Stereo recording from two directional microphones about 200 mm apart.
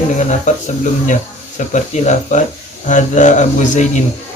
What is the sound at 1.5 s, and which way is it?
Speech, 40° left (ahead or behind).